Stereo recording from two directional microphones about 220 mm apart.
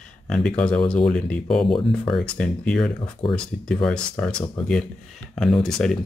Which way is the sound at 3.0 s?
25° left (ahead or behind).